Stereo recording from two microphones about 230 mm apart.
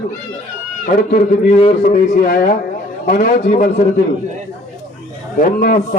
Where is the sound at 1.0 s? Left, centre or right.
Left.